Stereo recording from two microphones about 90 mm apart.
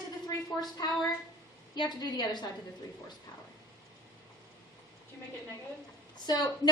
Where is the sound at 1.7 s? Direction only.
55° left (ahead or behind).